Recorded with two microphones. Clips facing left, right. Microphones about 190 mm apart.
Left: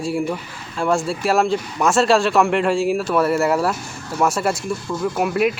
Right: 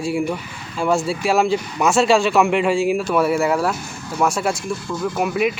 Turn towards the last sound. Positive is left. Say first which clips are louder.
# left 1 dB
turn(degrees=0)  # may be behind; listen again after turning